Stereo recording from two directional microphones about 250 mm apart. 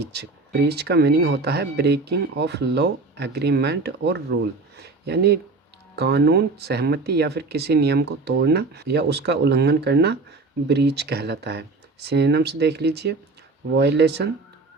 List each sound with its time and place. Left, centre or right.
0.0 s speech: right